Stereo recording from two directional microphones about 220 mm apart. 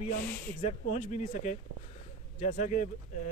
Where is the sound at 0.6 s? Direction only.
30° left (ahead or behind).